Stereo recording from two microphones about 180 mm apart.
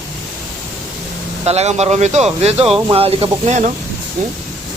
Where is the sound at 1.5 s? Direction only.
40° right (ahead or behind).